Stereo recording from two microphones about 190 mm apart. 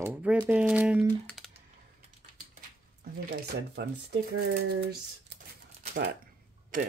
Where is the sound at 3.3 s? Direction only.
60° right (ahead or behind).